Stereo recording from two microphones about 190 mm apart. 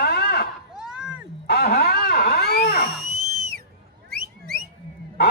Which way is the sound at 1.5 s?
55° left (ahead or behind).